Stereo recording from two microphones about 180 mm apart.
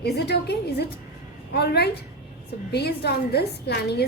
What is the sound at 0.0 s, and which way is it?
A woman's voice, 65° left (ahead or behind).